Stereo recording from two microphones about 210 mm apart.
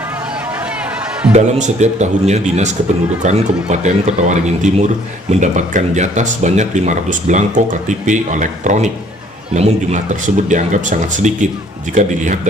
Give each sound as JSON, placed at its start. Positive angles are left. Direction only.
{"t": 1.3, "sound": "a man's voice", "side_deg": -35}